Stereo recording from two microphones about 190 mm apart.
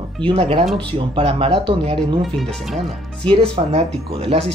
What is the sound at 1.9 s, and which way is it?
Speech, centre (ahead or behind).